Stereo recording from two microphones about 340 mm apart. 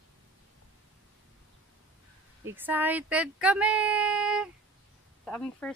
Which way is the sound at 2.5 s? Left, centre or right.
Centre.